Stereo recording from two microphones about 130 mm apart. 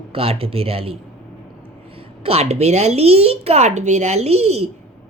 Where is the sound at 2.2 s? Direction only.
50° right (ahead or behind).